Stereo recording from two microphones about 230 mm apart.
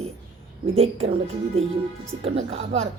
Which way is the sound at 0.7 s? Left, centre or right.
Right.